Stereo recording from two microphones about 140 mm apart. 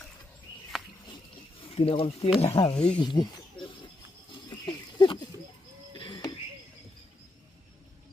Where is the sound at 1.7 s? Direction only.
45° left (ahead or behind).